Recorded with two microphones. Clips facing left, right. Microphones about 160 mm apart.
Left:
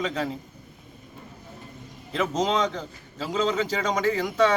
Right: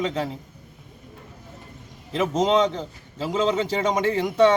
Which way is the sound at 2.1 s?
25° right (ahead or behind).